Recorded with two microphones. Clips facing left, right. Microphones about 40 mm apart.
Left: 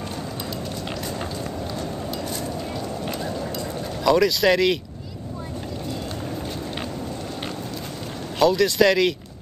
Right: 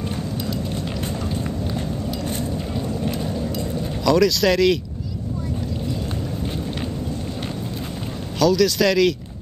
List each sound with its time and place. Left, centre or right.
4.0 s speech: centre
8.4 s speech: left